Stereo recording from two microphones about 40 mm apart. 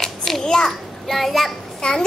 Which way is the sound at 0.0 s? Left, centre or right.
Centre.